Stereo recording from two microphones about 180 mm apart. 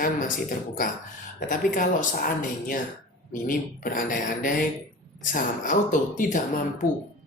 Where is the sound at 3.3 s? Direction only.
50° left (ahead or behind).